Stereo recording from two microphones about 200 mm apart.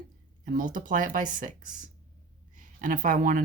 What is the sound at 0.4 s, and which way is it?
Speech, 45° right (ahead or behind).